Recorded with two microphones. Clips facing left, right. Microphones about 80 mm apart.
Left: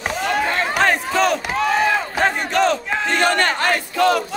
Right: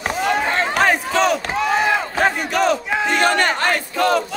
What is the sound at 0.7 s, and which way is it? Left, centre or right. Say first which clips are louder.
Battle cry: even; centre.